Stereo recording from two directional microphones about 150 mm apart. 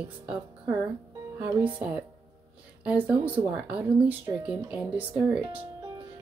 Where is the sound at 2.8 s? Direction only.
10° right (ahead or behind).